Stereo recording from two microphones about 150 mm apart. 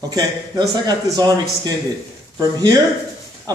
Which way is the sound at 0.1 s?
25° right (ahead or behind).